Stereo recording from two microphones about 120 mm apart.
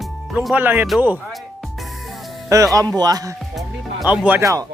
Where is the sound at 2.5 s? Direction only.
25° right (ahead or behind).